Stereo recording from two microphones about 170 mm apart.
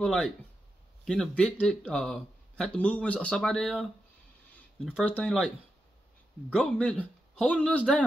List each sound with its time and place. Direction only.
0.0 s speech: 5° left (ahead or behind)
4.9 s speech: 5° left (ahead or behind)
6.5 s speech: 5° left (ahead or behind)